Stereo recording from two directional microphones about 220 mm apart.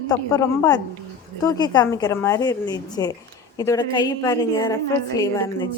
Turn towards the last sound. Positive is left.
turn(degrees=15)  # may be behind; listen again after turning